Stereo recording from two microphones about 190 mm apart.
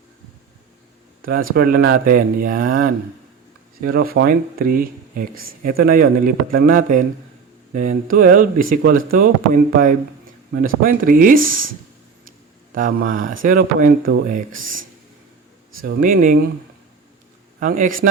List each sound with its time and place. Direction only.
1.2 s speech: 50° right (ahead or behind)
12.7 s speech: 45° right (ahead or behind)
16.0 s speech: 45° right (ahead or behind)
17.6 s speech: 45° right (ahead or behind)